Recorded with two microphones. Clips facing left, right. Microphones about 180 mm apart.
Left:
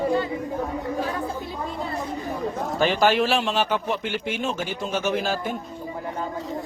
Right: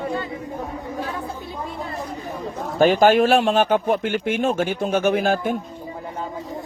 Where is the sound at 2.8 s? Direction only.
50° right (ahead or behind).